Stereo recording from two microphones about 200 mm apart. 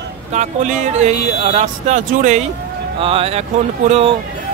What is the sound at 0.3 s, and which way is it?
Speech, 35° right (ahead or behind).